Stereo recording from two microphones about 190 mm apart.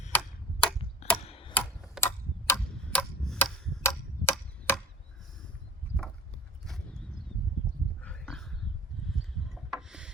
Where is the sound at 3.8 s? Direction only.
10° left (ahead or behind).